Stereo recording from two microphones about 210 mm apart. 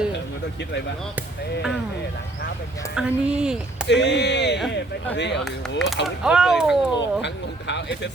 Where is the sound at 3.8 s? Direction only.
55° left (ahead or behind).